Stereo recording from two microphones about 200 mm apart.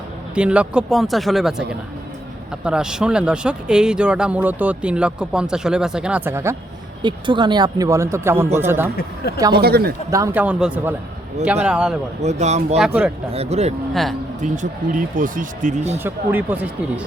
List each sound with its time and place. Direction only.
0.3 s speech: 5° right (ahead or behind)
2.6 s speech: 5° right (ahead or behind)
7.0 s speech: 25° right (ahead or behind)
9.5 s speech: 50° right (ahead or behind)
10.1 s speech: 10° right (ahead or behind)
12.2 s speech: 35° right (ahead or behind)
12.7 s speech: 5° right (ahead or behind)
13.3 s speech: 30° right (ahead or behind)
13.9 s speech: centre (ahead or behind)
14.4 s speech: 40° right (ahead or behind)
16.0 s speech: 10° right (ahead or behind)